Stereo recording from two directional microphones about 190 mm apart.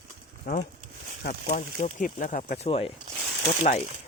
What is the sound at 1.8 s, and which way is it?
Speech, 40° left (ahead or behind).